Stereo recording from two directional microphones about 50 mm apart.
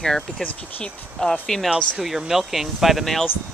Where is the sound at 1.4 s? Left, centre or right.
Centre.